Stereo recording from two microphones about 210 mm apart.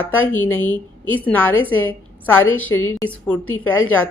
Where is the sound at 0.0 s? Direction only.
10° left (ahead or behind).